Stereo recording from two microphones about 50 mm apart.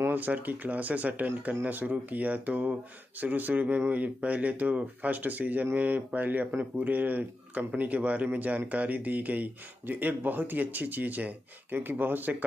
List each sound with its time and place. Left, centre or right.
0.1 s speech: right